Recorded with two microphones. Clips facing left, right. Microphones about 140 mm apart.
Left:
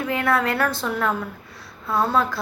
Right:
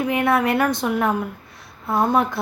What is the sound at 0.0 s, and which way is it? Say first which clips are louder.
A woman's voice: right 3 dB; 20° right (ahead or behind).